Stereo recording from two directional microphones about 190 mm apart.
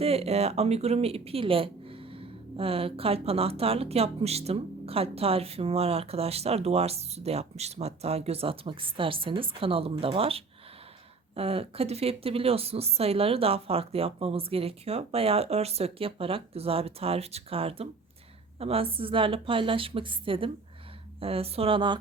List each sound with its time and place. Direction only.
0.0 s a woman's voice: 30° right (ahead or behind)